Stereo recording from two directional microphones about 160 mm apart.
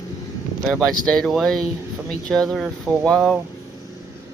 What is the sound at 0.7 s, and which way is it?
Speech, 5° left (ahead or behind).